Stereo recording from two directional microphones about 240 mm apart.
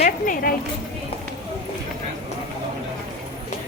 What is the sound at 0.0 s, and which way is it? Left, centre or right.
Speech, left.